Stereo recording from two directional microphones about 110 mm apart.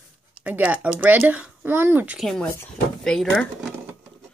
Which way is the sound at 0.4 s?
15° right (ahead or behind).